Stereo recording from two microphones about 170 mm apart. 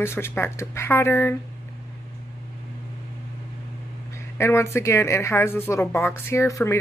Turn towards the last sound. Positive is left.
turn(degrees=15)  # may be behind; listen again after turning